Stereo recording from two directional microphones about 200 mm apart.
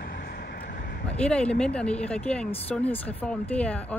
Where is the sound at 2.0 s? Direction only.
5° left (ahead or behind).